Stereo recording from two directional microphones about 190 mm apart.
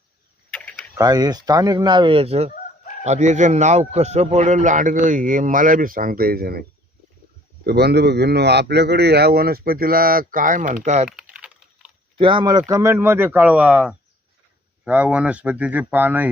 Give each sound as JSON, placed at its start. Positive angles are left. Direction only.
{"t": 0.9, "sound": "a man's voice", "side_deg": -20}
{"t": 11.2, "sound": "typing", "side_deg": -5}
{"t": 12.2, "sound": "speech", "side_deg": -25}